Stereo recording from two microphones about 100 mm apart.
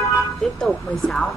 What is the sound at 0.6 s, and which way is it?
Speech, 5° left (ahead or behind).